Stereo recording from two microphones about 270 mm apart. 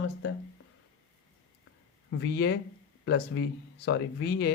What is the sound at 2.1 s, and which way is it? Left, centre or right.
Speech, left.